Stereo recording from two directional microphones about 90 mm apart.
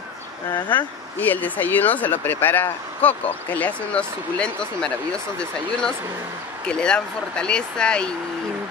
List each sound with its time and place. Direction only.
0.5 s speech: 60° left (ahead or behind)
1.1 s speech: 20° left (ahead or behind)